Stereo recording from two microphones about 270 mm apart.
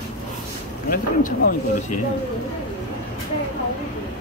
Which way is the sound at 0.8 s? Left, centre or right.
Left.